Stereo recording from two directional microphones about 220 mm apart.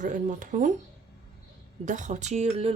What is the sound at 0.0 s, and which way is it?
Speech, 35° right (ahead or behind).